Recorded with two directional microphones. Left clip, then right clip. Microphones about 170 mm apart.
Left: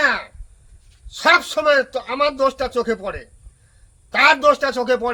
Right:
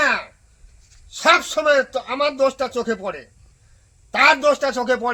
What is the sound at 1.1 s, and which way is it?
Speech, centre (ahead or behind).